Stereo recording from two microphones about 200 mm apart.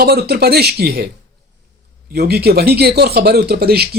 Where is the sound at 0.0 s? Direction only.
50° right (ahead or behind).